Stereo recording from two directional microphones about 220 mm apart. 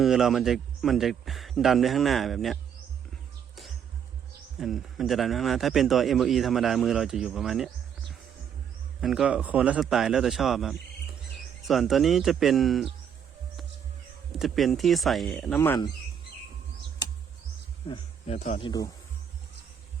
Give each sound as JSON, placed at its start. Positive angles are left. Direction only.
{"t": 0.0, "sound": "speech", "side_deg": 0}
{"t": 4.6, "sound": "speech", "side_deg": 0}
{"t": 9.0, "sound": "speech", "side_deg": 0}
{"t": 14.3, "sound": "speech", "side_deg": 0}
{"t": 17.8, "sound": "speech", "side_deg": 25}